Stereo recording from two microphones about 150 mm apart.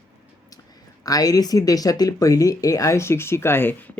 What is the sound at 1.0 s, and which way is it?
Speech, 25° left (ahead or behind).